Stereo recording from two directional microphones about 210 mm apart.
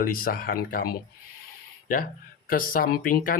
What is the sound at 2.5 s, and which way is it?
Speech, 40° left (ahead or behind).